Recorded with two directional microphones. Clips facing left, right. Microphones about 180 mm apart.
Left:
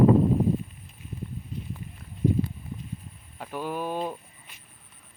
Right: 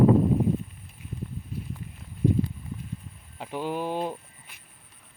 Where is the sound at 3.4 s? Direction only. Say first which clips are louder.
Right 1 dB; 20° right (ahead or behind).